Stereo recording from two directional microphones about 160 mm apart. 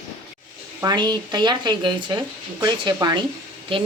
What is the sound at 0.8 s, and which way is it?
Speech, 25° right (ahead or behind).